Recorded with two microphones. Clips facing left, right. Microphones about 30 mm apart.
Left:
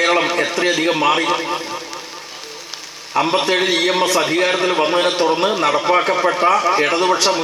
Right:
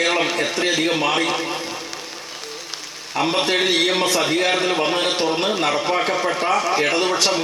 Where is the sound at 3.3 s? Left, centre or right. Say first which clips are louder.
Even; centre.